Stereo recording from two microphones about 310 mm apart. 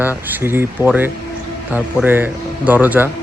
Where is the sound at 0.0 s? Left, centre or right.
Centre.